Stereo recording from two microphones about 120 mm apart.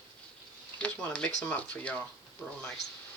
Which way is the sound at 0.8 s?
10° left (ahead or behind).